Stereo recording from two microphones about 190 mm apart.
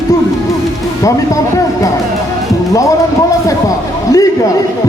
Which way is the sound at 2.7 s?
15° left (ahead or behind).